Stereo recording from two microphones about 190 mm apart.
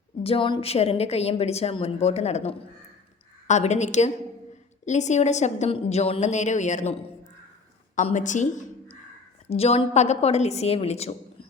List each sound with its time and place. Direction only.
0.2 s a woman's voice: 30° left (ahead or behind)